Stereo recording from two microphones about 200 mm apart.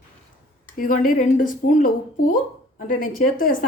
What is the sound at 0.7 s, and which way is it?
Speech, 45° left (ahead or behind).